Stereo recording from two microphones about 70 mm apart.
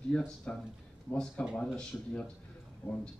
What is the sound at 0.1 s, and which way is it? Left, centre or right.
Speech, centre.